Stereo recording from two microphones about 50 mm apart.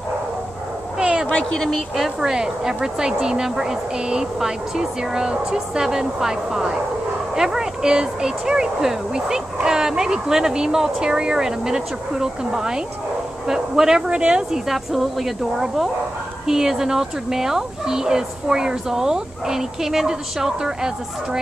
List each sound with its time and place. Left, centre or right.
0.9 s a sound: centre
2.0 s speech: centre
14.7 s speech: centre